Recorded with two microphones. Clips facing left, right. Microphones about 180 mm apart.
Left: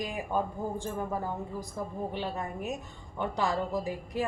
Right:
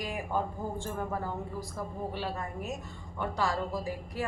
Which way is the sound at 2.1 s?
20° left (ahead or behind).